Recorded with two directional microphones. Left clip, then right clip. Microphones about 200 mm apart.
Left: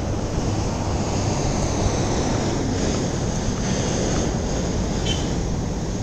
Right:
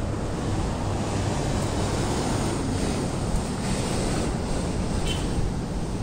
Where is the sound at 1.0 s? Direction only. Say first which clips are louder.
Left 4 dB; 35° right (ahead or behind).